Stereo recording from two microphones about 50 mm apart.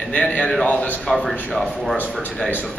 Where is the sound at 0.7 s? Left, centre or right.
Left.